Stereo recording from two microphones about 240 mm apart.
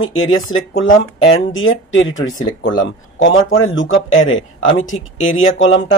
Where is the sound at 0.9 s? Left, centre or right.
Left.